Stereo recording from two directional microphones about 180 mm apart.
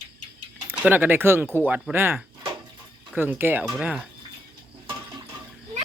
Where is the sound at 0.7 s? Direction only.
10° right (ahead or behind).